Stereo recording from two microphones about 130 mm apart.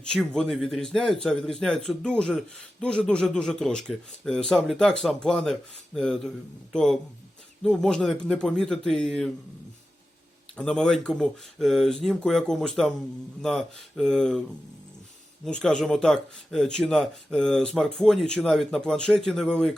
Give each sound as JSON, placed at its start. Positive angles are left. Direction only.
{"t": 0.0, "sound": "speech", "side_deg": 5}
{"t": 10.6, "sound": "speech", "side_deg": 5}
{"t": 15.4, "sound": "speech", "side_deg": 5}